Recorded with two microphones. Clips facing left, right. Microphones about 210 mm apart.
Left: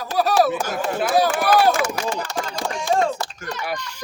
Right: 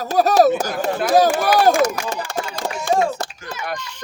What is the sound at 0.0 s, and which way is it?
Speech, 45° right (ahead or behind).